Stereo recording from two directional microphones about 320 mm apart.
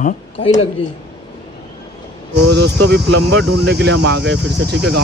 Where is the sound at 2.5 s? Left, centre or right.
Right.